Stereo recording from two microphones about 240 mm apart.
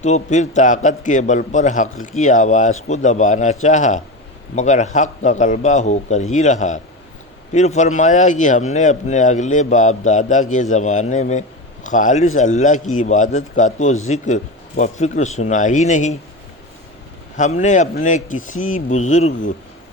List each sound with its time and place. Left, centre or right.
0.0 s a man's voice: left
17.3 s speech: left